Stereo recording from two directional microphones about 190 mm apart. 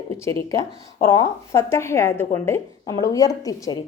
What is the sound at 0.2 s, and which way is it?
A woman's voice, 15° left (ahead or behind).